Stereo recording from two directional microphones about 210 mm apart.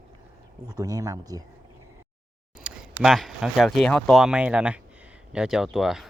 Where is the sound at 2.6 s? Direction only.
Centre (ahead or behind).